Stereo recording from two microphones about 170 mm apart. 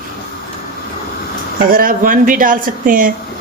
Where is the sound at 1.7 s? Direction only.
55° right (ahead or behind).